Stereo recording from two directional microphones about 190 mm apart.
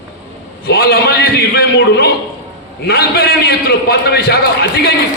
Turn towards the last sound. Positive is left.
turn(degrees=55)  # may be behind; listen again after turning